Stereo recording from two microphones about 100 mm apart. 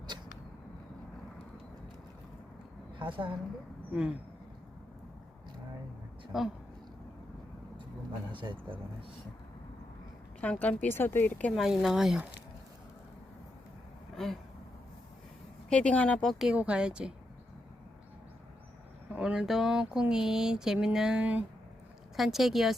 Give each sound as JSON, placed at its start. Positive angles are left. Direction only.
{"t": 3.0, "sound": "a woman's voice", "side_deg": -55}
{"t": 6.3, "sound": "speech", "side_deg": -5}
{"t": 8.3, "sound": "a woman's voice", "side_deg": -55}
{"t": 10.4, "sound": "speech", "side_deg": 15}
{"t": 11.5, "sound": "speech", "side_deg": 0}
{"t": 14.2, "sound": "speech", "side_deg": 5}
{"t": 15.7, "sound": "speech", "side_deg": 10}
{"t": 16.4, "sound": "speech", "side_deg": -10}
{"t": 19.1, "sound": "speech", "side_deg": -10}